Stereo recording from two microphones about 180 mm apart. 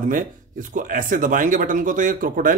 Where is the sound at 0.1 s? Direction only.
45° right (ahead or behind).